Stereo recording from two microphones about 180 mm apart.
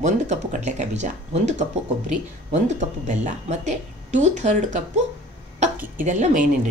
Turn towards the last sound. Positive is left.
turn(degrees=-45)  # may be behind; listen again after turning